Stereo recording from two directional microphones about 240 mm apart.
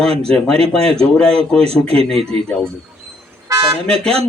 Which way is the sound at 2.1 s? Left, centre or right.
Centre.